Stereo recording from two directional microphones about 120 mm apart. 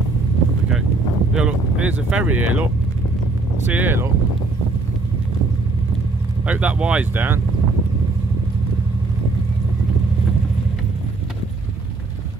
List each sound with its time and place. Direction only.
1.3 s speech: 10° right (ahead or behind)
6.4 s speech: 10° right (ahead or behind)